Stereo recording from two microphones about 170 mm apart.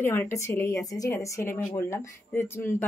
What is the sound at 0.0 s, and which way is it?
A woman's voice, 15° left (ahead or behind).